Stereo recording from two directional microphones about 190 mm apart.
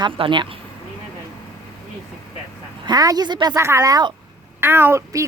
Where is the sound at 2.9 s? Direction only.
20° right (ahead or behind).